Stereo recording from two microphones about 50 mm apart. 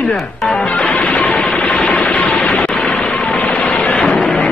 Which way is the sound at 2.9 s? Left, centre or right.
Centre.